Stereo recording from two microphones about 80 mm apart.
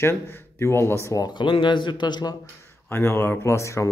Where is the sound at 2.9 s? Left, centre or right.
Left.